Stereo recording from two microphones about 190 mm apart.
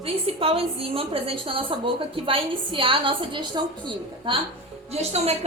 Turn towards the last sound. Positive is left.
turn(degrees=-35)  # may be behind; listen again after turning